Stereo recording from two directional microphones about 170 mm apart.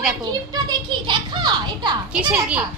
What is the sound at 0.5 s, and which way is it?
A child's voice, 25° right (ahead or behind).